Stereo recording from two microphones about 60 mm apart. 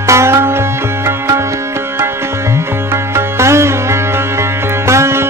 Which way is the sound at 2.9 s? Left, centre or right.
Right.